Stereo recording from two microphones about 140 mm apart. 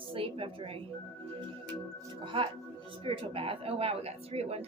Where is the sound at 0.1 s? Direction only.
40° right (ahead or behind).